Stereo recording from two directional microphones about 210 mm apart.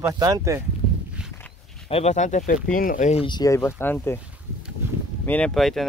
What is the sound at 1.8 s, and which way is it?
Speech, 30° left (ahead or behind).